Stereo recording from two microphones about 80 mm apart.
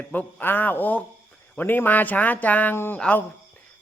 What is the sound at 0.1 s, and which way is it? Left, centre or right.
A man's voice, left.